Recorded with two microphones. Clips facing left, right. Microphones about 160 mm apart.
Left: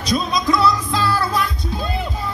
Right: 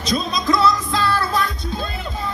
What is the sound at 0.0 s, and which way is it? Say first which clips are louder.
Music: left 2 dB; 25° right (ahead or behind).